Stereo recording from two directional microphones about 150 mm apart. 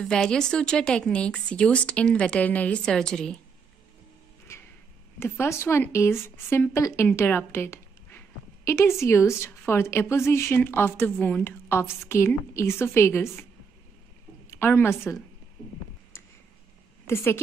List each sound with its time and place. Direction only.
0.0 s speech: 5° left (ahead or behind)
4.5 s a sound: 20° left (ahead or behind)
5.2 s a woman's voice: 15° left (ahead or behind)
14.5 s a woman's voice: 15° left (ahead or behind)
17.0 s a woman's voice: 15° left (ahead or behind)